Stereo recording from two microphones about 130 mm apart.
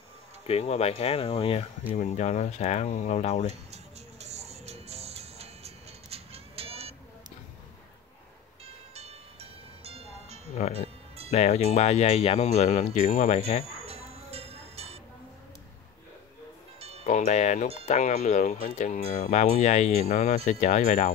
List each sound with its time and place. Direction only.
0.5 s speech: 55° left (ahead or behind)
2.0 s speech: 60° left (ahead or behind)
3.7 s music: 55° right (ahead or behind)
8.9 s music: 50° right (ahead or behind)
11.2 s speech: 60° left (ahead or behind)
13.8 s music: 50° right (ahead or behind)
17.0 s speech: 65° left (ahead or behind)